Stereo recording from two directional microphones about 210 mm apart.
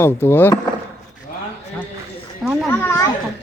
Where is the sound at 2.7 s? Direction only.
10° left (ahead or behind).